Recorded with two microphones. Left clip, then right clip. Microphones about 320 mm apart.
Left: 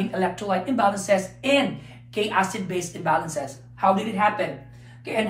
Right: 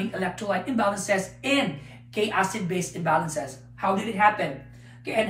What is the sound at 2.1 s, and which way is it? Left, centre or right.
Speech, centre.